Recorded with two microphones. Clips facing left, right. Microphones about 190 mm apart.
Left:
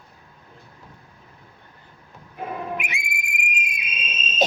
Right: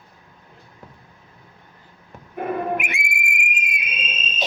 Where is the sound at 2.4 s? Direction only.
55° right (ahead or behind).